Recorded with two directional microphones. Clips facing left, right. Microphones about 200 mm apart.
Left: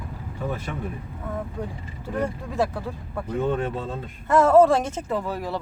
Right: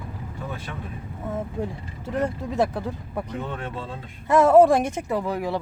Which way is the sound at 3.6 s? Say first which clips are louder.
Left 5 dB; 45° left (ahead or behind).